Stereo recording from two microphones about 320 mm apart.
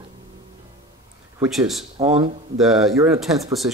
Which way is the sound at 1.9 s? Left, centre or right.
Centre.